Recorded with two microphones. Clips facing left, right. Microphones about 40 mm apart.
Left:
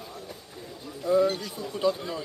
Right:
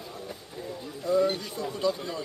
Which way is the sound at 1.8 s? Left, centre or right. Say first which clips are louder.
Left 3 dB; centre.